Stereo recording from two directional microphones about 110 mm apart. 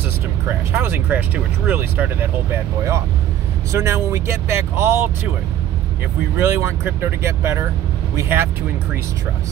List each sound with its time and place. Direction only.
0.5 s speech: 20° right (ahead or behind)
3.7 s speech: 25° right (ahead or behind)
6.3 s speech: 25° right (ahead or behind)